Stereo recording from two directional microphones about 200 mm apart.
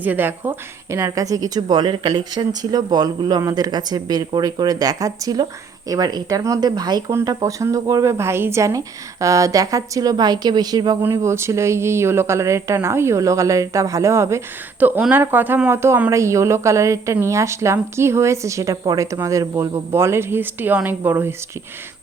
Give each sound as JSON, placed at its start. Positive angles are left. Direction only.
{"t": 0.0, "sound": "a woman's voice", "side_deg": -10}